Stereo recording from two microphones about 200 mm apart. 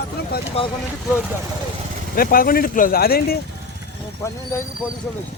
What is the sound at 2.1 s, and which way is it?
Speech, 45° left (ahead or behind).